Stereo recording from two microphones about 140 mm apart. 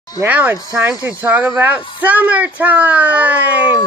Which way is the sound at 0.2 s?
10° right (ahead or behind).